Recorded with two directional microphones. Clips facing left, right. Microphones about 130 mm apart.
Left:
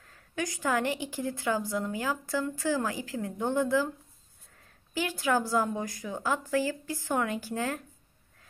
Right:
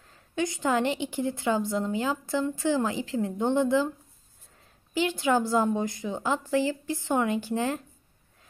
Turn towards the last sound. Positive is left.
turn(degrees=-20)  # may be behind; listen again after turning